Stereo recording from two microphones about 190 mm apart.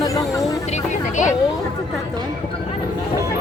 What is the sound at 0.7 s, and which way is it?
Speech, 40° left (ahead or behind).